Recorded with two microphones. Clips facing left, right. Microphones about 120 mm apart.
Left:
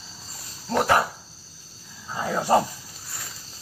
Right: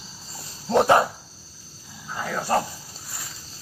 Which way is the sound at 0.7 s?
20° right (ahead or behind).